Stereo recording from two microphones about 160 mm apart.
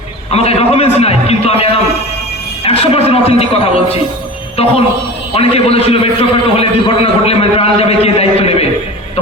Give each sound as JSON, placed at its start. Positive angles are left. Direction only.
{"t": 0.3, "sound": "a man's voice", "side_deg": 40}
{"t": 5.3, "sound": "a man's voice", "side_deg": 40}